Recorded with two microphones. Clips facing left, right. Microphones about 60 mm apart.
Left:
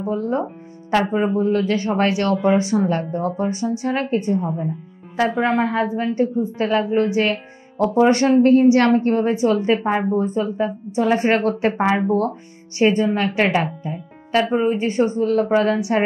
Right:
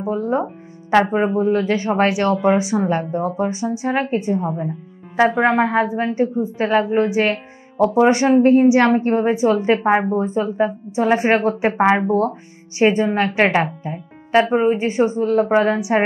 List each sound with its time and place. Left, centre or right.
0.0 s speech: right
11.7 s speech: right